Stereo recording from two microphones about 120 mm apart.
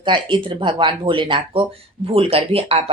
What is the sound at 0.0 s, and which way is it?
Speech, 45° right (ahead or behind).